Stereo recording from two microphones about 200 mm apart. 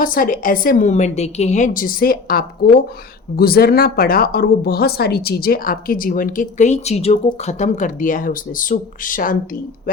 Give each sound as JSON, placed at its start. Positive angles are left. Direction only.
{"t": 0.0, "sound": "speech", "side_deg": 45}